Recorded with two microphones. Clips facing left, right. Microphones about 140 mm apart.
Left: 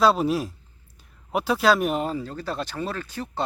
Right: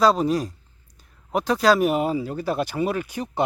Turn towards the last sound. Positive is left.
turn(degrees=-15)  # may be behind; listen again after turning